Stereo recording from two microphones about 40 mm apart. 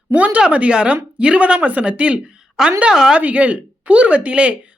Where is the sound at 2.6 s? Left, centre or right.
Centre.